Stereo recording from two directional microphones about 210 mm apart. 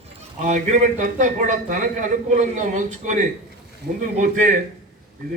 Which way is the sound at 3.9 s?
50° right (ahead or behind).